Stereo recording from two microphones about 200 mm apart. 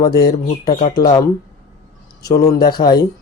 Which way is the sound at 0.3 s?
20° left (ahead or behind).